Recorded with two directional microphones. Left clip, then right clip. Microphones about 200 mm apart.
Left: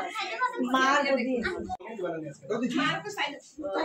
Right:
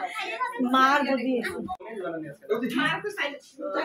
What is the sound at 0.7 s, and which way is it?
Speech, 30° right (ahead or behind).